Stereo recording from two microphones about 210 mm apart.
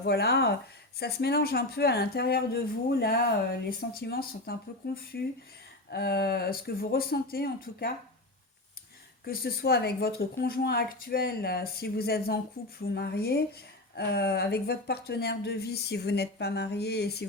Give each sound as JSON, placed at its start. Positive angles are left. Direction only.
{"t": 0.0, "sound": "speech", "side_deg": 50}
{"t": 9.2, "sound": "speech", "side_deg": 45}